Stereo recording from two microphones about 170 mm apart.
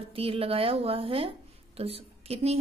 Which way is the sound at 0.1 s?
35° right (ahead or behind).